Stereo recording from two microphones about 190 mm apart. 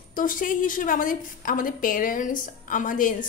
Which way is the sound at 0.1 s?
45° left (ahead or behind).